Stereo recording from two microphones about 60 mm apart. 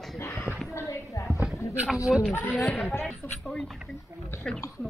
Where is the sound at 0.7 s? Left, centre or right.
Left.